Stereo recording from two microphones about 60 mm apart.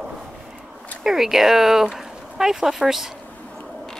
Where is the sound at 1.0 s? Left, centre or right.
Centre.